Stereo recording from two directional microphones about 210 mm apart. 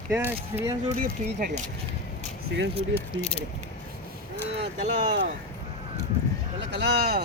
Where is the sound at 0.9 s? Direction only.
40° right (ahead or behind).